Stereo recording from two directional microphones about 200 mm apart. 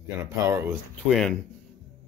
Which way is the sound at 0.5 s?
10° right (ahead or behind).